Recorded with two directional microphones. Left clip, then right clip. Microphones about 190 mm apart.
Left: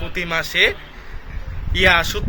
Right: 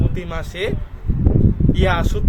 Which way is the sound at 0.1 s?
15° right (ahead or behind).